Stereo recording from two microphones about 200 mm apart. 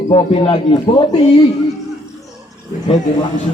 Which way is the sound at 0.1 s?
30° left (ahead or behind).